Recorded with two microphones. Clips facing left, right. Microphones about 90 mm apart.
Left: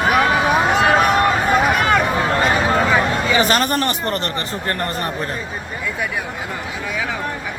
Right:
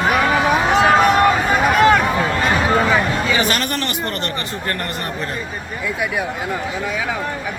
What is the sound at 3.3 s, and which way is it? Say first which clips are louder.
Speech: left 3 dB; 35° left (ahead or behind).